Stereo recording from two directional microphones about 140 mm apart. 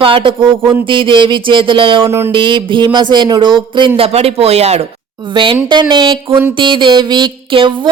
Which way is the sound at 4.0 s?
45° right (ahead or behind).